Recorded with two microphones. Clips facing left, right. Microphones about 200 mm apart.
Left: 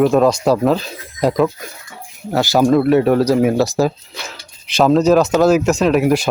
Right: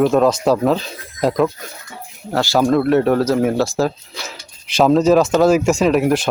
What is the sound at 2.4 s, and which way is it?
Speech, 15° left (ahead or behind).